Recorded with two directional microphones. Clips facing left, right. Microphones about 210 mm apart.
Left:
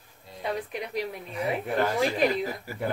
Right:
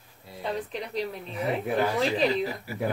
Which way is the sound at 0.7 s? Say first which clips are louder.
Even; 10° left (ahead or behind).